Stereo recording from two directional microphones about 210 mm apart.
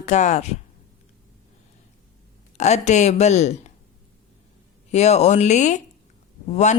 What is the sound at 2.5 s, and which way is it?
Speech, 30° left (ahead or behind).